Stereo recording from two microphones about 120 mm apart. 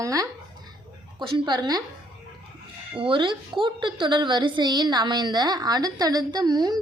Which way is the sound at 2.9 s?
45° right (ahead or behind).